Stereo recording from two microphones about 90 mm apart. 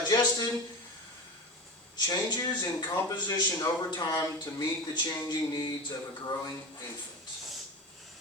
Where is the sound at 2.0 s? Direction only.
40° left (ahead or behind).